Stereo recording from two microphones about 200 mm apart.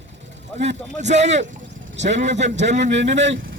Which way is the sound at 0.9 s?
35° right (ahead or behind).